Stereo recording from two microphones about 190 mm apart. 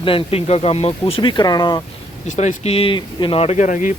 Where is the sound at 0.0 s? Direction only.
30° left (ahead or behind).